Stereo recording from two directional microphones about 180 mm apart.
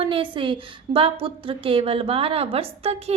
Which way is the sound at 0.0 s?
30° right (ahead or behind).